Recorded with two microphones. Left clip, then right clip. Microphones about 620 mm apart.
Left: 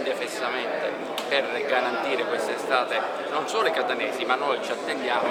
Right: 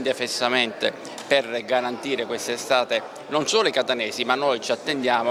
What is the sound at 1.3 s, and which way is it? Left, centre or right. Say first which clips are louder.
A man's voice: right 3 dB; right.